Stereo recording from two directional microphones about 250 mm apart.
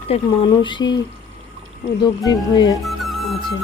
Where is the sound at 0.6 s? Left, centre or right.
Centre.